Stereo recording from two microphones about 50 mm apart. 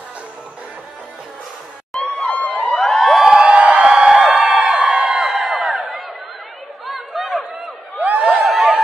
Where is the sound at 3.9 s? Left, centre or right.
Centre.